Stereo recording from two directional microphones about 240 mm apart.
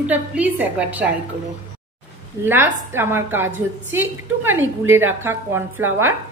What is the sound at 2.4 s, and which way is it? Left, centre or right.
A woman's voice, centre.